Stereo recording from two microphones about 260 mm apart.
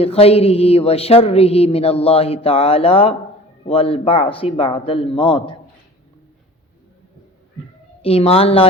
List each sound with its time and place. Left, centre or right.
0.0 s speech: left
8.0 s speech: left